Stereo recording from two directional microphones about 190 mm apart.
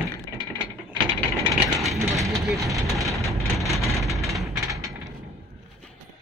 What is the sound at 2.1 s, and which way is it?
Speech, centre (ahead or behind).